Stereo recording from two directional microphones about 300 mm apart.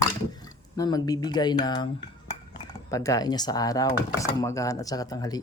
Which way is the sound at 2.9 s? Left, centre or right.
Centre.